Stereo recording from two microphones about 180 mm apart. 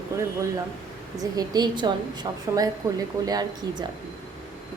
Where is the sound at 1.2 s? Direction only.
20° right (ahead or behind).